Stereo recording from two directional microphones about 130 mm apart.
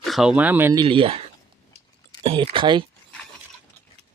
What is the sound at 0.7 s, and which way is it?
Speech, 40° right (ahead or behind).